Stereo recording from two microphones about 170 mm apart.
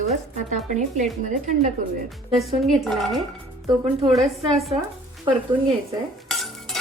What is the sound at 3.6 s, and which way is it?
Speech, 25° right (ahead or behind).